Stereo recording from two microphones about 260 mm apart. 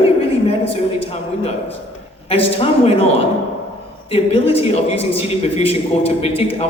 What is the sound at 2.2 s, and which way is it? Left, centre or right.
A man's voice, left.